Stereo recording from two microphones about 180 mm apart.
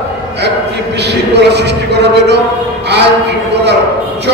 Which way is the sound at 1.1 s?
70° right (ahead or behind).